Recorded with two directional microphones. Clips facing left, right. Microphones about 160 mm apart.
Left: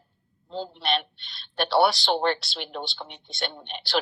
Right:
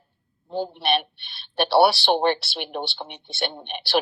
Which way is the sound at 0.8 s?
15° right (ahead or behind).